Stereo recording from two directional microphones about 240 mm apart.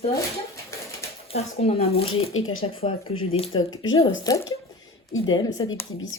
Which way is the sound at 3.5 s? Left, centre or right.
Left.